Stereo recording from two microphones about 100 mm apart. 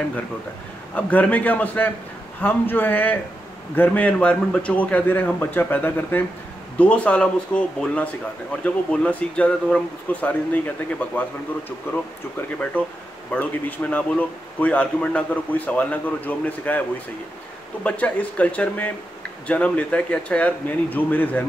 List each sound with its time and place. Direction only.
0.9 s a man's voice: 15° left (ahead or behind)
12.4 s a man's voice: 15° left (ahead or behind)
17.8 s a man's voice: 15° left (ahead or behind)